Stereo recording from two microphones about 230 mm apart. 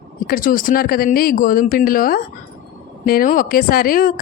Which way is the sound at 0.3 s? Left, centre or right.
Left.